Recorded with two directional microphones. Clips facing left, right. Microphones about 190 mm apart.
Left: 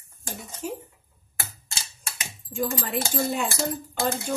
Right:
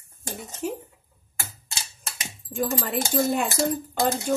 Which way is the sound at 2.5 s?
55° right (ahead or behind).